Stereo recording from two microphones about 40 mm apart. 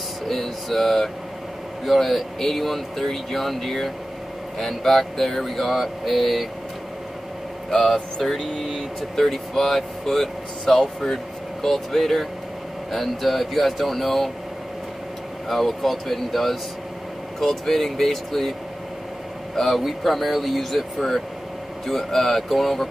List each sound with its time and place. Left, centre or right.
0.3 s speech: centre
7.8 s speech: centre
15.4 s speech: centre
19.5 s speech: centre